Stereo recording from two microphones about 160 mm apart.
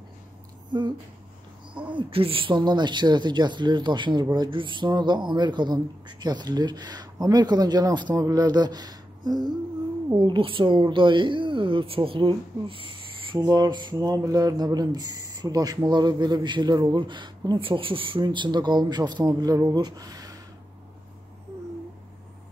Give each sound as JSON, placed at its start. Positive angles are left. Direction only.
{"t": 0.7, "sound": "speech", "side_deg": -30}
{"t": 2.0, "sound": "a woman's voice", "side_deg": -35}